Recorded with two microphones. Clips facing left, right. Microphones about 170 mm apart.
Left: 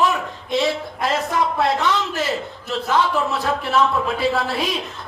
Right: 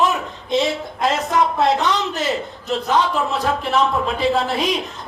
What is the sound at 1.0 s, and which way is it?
Speech, 20° right (ahead or behind).